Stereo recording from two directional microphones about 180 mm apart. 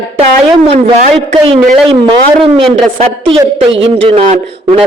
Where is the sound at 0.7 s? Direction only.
35° right (ahead or behind).